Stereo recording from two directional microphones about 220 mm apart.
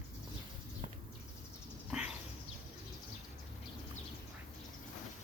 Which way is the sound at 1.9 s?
5° right (ahead or behind).